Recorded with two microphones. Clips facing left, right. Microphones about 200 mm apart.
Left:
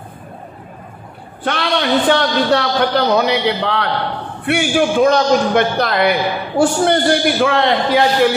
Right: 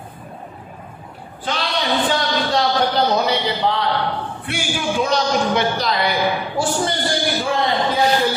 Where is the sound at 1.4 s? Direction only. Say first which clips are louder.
Left 5 dB; 65° left (ahead or behind).